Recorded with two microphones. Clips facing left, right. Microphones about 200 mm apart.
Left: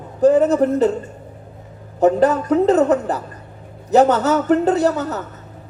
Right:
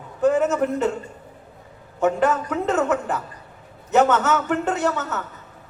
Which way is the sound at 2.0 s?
35° left (ahead or behind).